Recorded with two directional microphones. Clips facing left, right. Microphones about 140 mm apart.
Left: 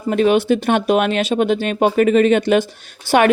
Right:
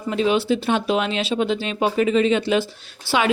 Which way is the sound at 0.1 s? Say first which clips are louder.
Left 5 dB; 55° left (ahead or behind).